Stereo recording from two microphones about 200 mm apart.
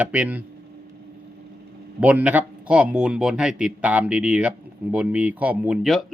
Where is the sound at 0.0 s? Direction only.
5° right (ahead or behind).